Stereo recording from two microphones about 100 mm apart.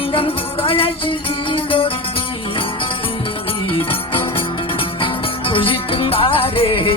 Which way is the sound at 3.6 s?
65° left (ahead or behind).